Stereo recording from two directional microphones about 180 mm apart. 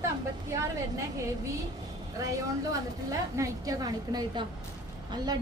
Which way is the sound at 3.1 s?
20° right (ahead or behind).